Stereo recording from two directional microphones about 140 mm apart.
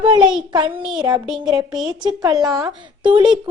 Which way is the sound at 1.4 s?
25° right (ahead or behind).